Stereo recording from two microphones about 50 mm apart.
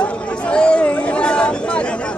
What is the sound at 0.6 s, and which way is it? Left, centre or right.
Chatter, left.